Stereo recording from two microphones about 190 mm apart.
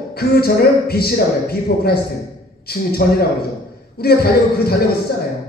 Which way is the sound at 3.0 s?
60° left (ahead or behind).